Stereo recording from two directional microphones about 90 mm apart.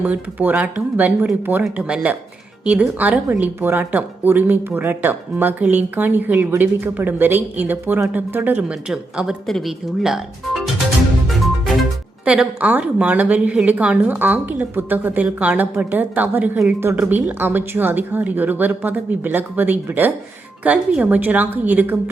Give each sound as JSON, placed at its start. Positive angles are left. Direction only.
{"t": 0.0, "sound": "a woman's voice", "side_deg": -20}
{"t": 8.9, "sound": "speech", "side_deg": -5}
{"t": 11.3, "sound": "music", "side_deg": 0}
{"t": 12.2, "sound": "a woman's voice", "side_deg": -15}